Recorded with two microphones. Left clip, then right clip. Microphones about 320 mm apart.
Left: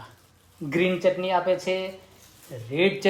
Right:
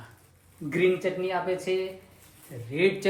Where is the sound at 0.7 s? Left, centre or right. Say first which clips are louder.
Left 3 dB; centre.